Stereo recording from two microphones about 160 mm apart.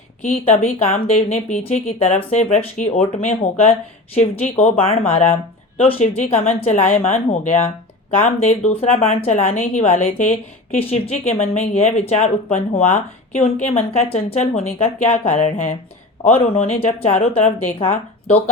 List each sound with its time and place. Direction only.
0.2 s a woman's voice: 50° left (ahead or behind)
18.3 s speech: 40° left (ahead or behind)